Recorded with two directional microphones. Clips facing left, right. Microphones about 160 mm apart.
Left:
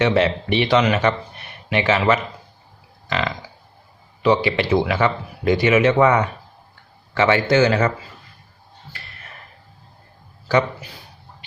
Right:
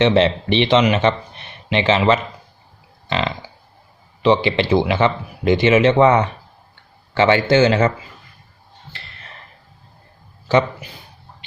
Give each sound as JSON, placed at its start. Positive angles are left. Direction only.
{"t": 0.0, "sound": "speech", "side_deg": -25}
{"t": 10.5, "sound": "speech", "side_deg": -25}